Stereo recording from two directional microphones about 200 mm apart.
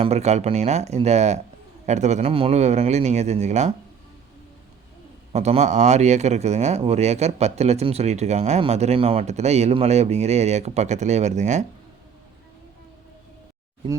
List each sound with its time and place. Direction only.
0.0 s a man's voice: 35° right (ahead or behind)
5.3 s a man's voice: 35° right (ahead or behind)